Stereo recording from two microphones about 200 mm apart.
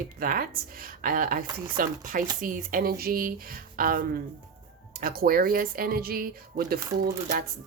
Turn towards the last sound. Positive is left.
turn(degrees=-50)  # may be behind; listen again after turning